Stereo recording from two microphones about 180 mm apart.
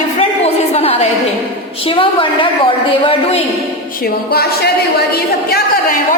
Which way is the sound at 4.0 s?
60° left (ahead or behind).